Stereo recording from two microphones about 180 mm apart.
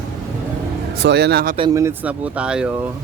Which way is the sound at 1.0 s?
70° right (ahead or behind).